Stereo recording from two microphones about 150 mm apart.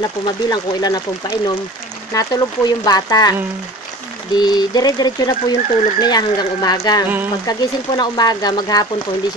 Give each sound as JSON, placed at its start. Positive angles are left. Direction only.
{"t": 0.0, "sound": "speech", "side_deg": 25}
{"t": 4.4, "sound": "speech", "side_deg": 25}